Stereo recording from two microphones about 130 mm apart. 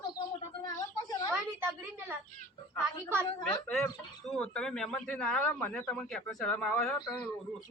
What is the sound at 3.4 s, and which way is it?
A man's voice, 5° left (ahead or behind).